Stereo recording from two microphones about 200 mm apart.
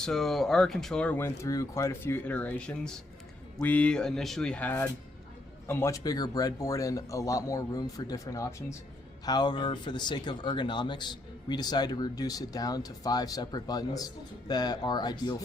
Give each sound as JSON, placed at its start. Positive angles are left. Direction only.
{"t": 0.0, "sound": "speech", "side_deg": 0}